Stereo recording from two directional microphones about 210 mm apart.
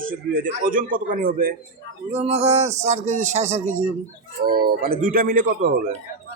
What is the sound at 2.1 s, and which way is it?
Speech, 30° right (ahead or behind).